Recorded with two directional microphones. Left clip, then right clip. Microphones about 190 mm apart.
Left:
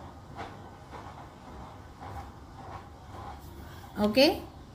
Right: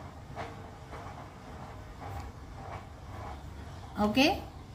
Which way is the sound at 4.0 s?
20° left (ahead or behind).